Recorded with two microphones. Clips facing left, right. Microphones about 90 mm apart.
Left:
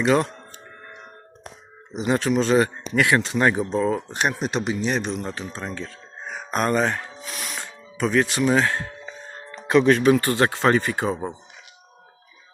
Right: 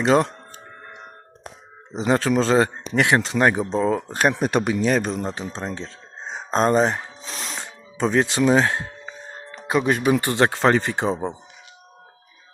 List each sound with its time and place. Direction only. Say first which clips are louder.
0.0 s a man's voice: right 2 dB; 30° right (ahead or behind)
1.9 s a man's voice: right 2 dB; 35° right (ahead or behind)
4.4 s speech: right 4 dB; 50° right (ahead or behind)
5.2 s speech: right 3 dB; 30° right (ahead or behind)
9.6 s speech: left 3 dB; 5° right (ahead or behind); by 11.3 s 30° right (ahead or behind)